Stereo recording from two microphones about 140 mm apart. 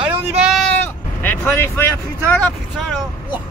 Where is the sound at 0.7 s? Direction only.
15° left (ahead or behind).